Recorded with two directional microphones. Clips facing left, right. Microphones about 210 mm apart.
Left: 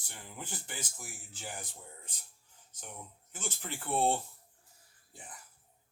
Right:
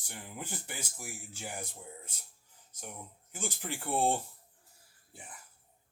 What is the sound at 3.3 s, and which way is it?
Speech, 10° right (ahead or behind).